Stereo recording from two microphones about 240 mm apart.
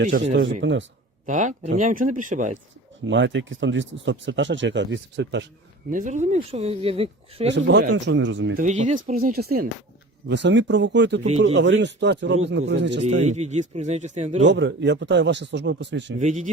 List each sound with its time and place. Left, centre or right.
0.0 s speech: right
1.3 s speech: right
3.0 s speech: right
5.9 s speech: right
7.5 s speech: right
8.5 s speech: right
13.2 s speech: right
14.4 s speech: right
16.1 s speech: right